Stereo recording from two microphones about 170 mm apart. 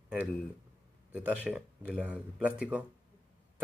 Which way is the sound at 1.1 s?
5° right (ahead or behind).